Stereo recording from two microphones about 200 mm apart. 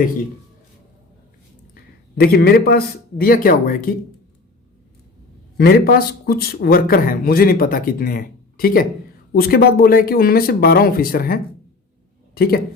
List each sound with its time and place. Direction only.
1.7 s a man's voice: 50° left (ahead or behind)
5.5 s a man's voice: 50° left (ahead or behind)